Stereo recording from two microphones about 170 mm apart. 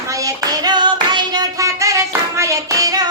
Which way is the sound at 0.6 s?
25° right (ahead or behind).